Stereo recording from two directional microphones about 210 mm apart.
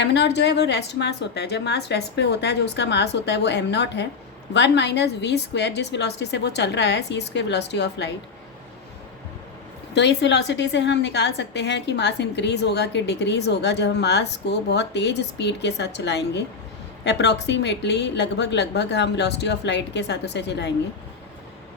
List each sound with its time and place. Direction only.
0.0 s a woman's voice: 55° left (ahead or behind)
9.9 s a woman's voice: 55° left (ahead or behind)